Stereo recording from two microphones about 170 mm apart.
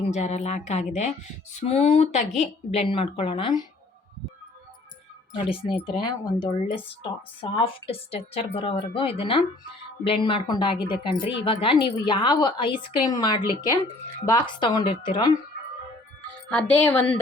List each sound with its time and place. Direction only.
0.1 s speech: 40° left (ahead or behind)
5.5 s a woman's voice: 30° left (ahead or behind)
16.5 s speech: 10° left (ahead or behind)